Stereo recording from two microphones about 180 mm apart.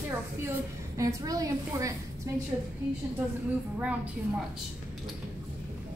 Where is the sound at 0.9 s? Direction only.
20° right (ahead or behind).